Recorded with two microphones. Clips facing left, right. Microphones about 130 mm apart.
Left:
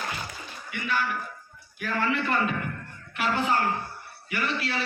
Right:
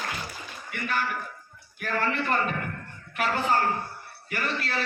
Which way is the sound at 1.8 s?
45° right (ahead or behind).